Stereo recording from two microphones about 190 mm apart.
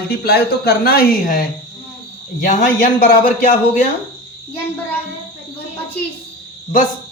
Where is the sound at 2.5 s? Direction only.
45° left (ahead or behind).